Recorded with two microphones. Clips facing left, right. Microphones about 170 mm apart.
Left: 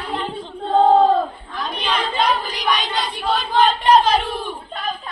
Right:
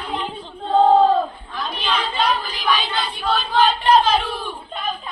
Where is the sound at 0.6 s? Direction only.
10° left (ahead or behind).